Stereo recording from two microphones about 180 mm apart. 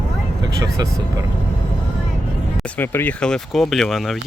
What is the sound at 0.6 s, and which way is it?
Speech, 20° right (ahead or behind).